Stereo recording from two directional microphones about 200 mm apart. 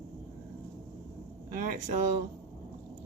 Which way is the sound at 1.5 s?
40° right (ahead or behind).